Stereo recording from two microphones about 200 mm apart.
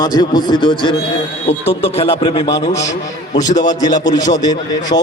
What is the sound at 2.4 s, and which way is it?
A man's voice, 15° left (ahead or behind).